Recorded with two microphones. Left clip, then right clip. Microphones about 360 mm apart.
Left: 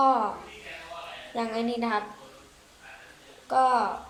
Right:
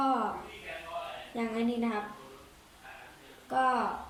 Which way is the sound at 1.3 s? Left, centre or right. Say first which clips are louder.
Left 5 dB; left.